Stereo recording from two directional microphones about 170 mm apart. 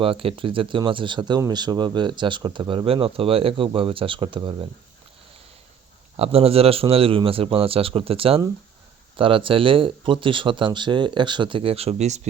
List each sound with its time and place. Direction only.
0.0 s speech: 30° right (ahead or behind)
6.1 s speech: 35° right (ahead or behind)